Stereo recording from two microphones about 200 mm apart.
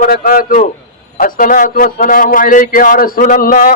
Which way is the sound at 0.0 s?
45° left (ahead or behind).